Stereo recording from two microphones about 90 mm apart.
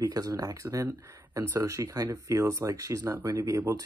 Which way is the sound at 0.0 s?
45° right (ahead or behind).